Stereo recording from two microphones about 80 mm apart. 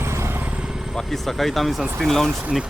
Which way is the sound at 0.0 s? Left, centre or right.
Right.